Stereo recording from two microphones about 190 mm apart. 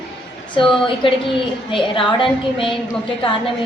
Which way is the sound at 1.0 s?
25° left (ahead or behind).